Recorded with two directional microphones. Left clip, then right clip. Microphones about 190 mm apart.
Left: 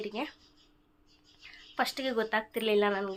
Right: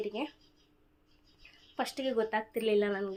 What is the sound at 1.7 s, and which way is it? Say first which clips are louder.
Speech: left 2 dB; centre (ahead or behind).